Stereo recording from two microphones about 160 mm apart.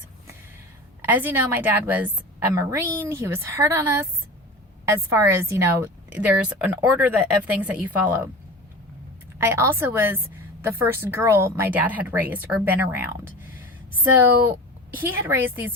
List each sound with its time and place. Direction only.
1.0 s speech: 10° right (ahead or behind)
9.4 s speech: 15° right (ahead or behind)